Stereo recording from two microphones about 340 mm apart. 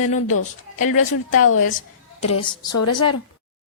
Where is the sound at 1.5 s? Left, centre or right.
Left.